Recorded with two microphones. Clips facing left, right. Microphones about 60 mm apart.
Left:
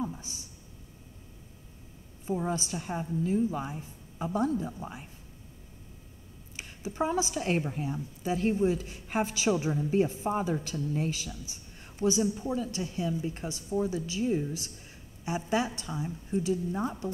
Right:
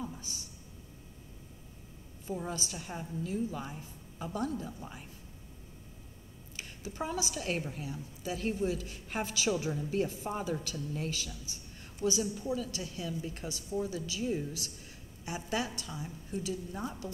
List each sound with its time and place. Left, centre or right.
0.2 s a sound: left
2.2 s a woman's voice: left
6.5 s a woman's voice: left